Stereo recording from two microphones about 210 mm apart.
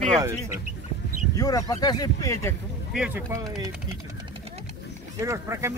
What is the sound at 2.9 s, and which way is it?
Speech, 5° right (ahead or behind).